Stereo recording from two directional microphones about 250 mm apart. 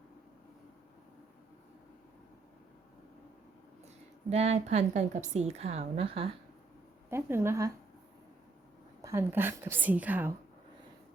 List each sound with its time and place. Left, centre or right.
4.3 s a woman's voice: right
7.1 s a woman's voice: centre
9.0 s a woman's voice: centre